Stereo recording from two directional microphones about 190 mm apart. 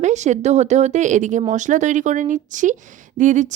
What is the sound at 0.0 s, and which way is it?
Speech, 40° right (ahead or behind).